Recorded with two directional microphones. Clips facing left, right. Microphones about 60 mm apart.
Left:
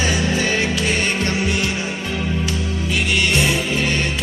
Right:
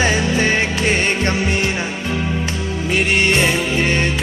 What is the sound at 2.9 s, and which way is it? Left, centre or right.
Music, right.